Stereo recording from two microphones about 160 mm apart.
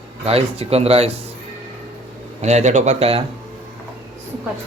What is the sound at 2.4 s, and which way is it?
Speech, 45° right (ahead or behind).